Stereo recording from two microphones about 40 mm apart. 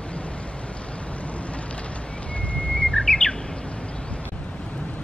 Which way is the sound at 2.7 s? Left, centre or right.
Left.